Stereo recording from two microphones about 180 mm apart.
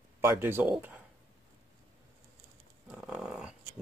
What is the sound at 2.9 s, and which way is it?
Dog, 5° right (ahead or behind).